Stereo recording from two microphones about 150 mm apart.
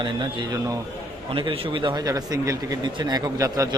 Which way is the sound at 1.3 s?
35° right (ahead or behind).